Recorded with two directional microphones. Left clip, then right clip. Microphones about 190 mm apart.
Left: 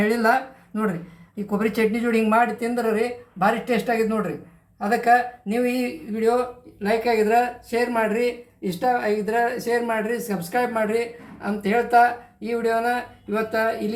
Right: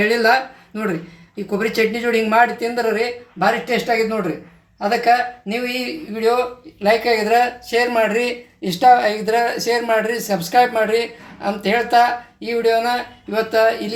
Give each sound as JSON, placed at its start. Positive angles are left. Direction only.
{"t": 0.0, "sound": "speech", "side_deg": -10}
{"t": 1.5, "sound": "speech", "side_deg": -10}
{"t": 6.8, "sound": "speech", "side_deg": -30}